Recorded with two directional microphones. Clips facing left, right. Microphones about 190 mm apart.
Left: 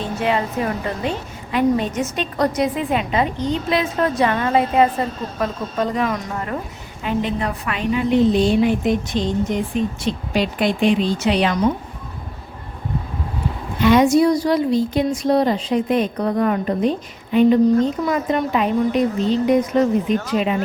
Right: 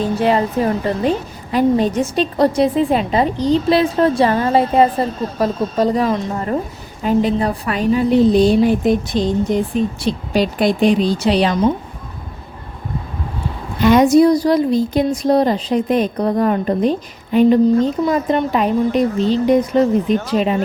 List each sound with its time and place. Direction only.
0.0 s a woman's voice: 35° right (ahead or behind)
13.8 s a woman's voice: 40° right (ahead or behind)